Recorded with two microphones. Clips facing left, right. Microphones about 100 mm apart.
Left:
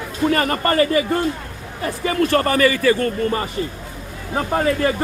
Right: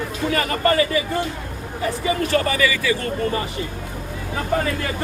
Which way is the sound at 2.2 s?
50° left (ahead or behind).